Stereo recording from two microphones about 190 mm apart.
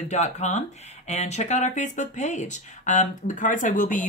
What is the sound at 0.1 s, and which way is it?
Speech, 35° left (ahead or behind).